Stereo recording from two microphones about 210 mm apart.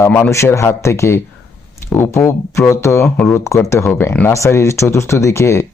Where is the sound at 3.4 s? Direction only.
15° left (ahead or behind).